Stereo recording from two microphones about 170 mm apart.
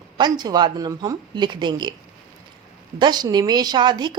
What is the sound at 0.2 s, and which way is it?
A woman's voice, 25° right (ahead or behind).